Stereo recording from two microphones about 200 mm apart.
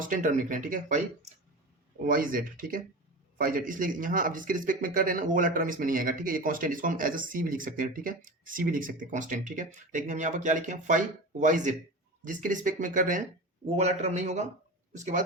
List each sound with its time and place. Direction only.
0.0 s speech: 40° right (ahead or behind)